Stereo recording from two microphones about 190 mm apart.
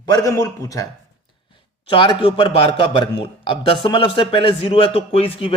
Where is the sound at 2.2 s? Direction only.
30° left (ahead or behind).